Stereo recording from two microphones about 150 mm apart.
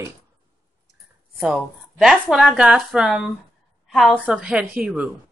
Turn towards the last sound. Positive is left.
turn(degrees=-5)  # may be behind; listen again after turning